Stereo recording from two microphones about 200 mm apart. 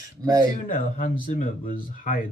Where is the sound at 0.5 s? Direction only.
40° left (ahead or behind).